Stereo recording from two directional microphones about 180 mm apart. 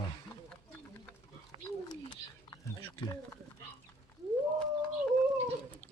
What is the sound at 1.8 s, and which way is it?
Bird, 25° left (ahead or behind).